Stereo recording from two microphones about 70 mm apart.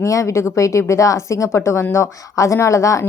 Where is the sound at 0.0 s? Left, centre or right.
Left.